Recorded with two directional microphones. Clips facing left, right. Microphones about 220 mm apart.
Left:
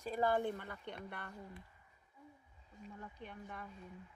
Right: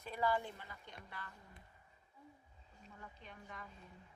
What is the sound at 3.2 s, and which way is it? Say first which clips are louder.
Speech: left 4 dB; 55° left (ahead or behind).